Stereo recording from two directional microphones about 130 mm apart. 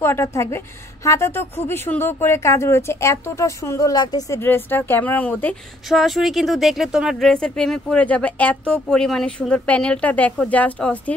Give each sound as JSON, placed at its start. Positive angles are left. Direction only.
{"t": 0.0, "sound": "a woman's voice", "side_deg": 20}
{"t": 5.9, "sound": "speech", "side_deg": 0}